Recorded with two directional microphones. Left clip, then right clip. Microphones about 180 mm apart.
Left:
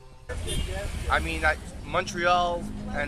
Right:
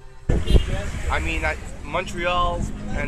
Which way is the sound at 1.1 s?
15° left (ahead or behind).